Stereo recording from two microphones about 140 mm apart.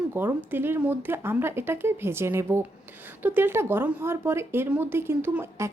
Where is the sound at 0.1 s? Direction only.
15° right (ahead or behind).